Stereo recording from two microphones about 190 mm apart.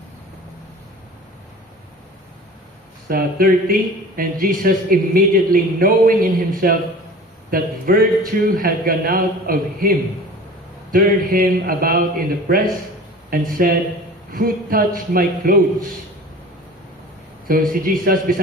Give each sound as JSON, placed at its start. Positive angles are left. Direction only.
{"t": 3.1, "sound": "a man's voice", "side_deg": -50}
{"t": 10.9, "sound": "a man's voice", "side_deg": -50}
{"t": 17.5, "sound": "a man's voice", "side_deg": -50}